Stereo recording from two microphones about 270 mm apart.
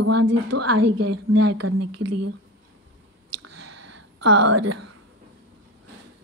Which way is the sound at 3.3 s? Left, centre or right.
Right.